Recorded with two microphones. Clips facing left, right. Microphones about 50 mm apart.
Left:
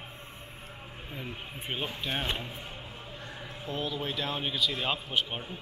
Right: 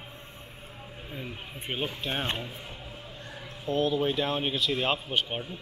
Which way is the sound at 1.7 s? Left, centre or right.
Centre.